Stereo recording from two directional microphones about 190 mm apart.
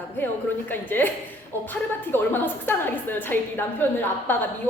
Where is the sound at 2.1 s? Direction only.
10° left (ahead or behind).